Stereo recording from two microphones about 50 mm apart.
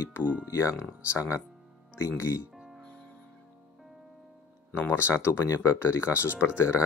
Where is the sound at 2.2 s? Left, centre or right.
Left.